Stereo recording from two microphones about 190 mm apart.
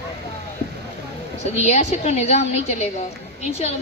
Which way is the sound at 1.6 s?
35° left (ahead or behind).